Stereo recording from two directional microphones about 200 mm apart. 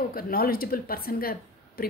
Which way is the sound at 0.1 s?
45° left (ahead or behind).